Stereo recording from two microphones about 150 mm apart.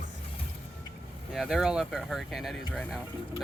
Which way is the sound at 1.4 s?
5° right (ahead or behind).